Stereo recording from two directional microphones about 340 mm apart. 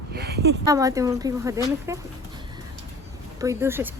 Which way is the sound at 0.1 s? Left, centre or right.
Right.